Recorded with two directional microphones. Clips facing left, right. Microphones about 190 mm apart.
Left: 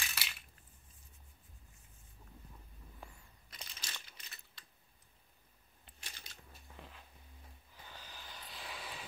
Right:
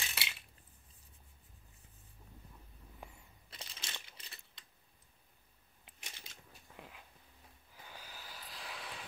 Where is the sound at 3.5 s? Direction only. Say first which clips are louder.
Right 2 dB; 30° right (ahead or behind).